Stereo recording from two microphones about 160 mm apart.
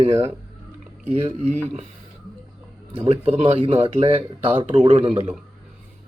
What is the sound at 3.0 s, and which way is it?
Speech, 35° right (ahead or behind).